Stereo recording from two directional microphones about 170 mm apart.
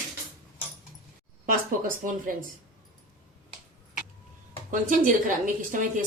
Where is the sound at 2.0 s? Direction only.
55° right (ahead or behind).